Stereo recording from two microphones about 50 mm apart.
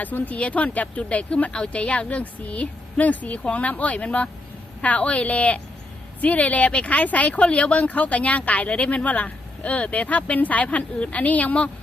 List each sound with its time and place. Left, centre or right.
0.0 s speech: left